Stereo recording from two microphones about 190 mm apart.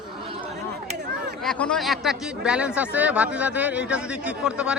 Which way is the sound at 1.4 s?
5° left (ahead or behind).